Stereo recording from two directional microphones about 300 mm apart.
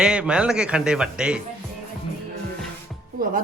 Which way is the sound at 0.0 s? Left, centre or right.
Centre.